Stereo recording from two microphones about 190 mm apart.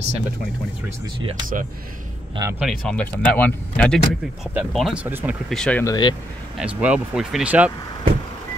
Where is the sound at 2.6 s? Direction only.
5° left (ahead or behind).